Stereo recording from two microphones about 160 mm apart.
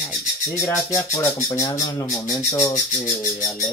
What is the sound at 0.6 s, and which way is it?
Speech, 20° left (ahead or behind).